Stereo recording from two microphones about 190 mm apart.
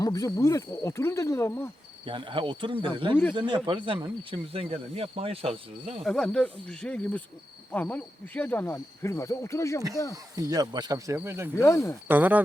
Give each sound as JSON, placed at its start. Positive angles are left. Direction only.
{"t": 0.0, "sound": "speech", "side_deg": 20}
{"t": 2.0, "sound": "speech", "side_deg": -25}
{"t": 6.0, "sound": "speech", "side_deg": 5}
{"t": 10.3, "sound": "speech", "side_deg": -20}
{"t": 11.5, "sound": "speech", "side_deg": 15}
{"t": 12.0, "sound": "speech", "side_deg": -10}